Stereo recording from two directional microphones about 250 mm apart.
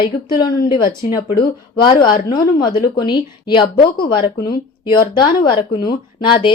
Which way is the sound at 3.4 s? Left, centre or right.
Centre.